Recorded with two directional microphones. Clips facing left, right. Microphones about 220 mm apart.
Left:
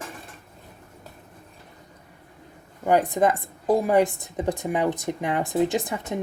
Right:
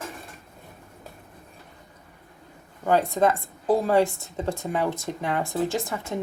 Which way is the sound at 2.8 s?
15° left (ahead or behind).